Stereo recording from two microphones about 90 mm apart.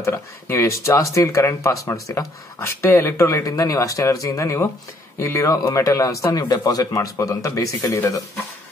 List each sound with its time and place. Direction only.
0.0 s speech: 30° left (ahead or behind)